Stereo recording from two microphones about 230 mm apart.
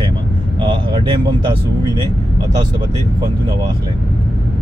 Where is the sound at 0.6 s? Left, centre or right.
Right.